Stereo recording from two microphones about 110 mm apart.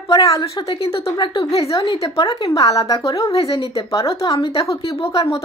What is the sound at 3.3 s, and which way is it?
Speech, 60° left (ahead or behind).